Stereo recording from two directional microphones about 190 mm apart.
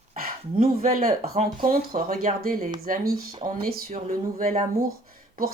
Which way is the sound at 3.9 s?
45° right (ahead or behind).